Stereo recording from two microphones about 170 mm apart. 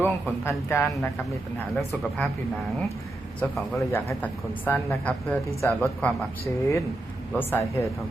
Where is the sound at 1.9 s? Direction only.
5° left (ahead or behind).